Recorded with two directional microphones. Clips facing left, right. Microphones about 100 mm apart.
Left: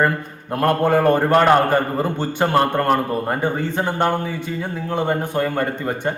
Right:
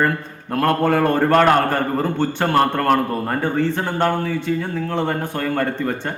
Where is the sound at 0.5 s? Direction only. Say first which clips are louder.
Left 1 dB; 20° left (ahead or behind).